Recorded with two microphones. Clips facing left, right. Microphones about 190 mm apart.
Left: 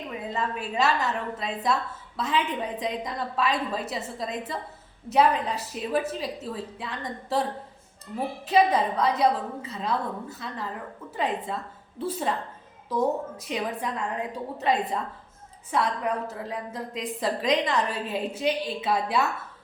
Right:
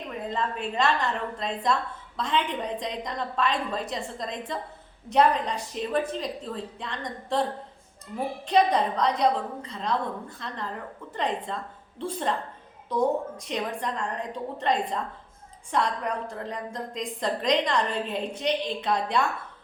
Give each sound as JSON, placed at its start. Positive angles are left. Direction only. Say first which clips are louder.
{"t": 0.1, "sound": "a woman's voice", "louder": "right 1 dB", "side_deg": 5}
{"t": 8.4, "sound": "a woman's voice", "louder": "left 1 dB", "side_deg": 5}